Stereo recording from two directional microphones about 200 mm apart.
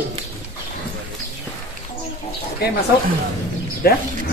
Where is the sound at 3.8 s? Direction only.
50° left (ahead or behind).